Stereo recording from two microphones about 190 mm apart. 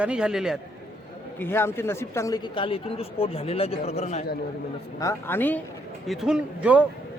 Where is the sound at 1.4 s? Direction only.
10° left (ahead or behind); by 4.2 s 35° left (ahead or behind).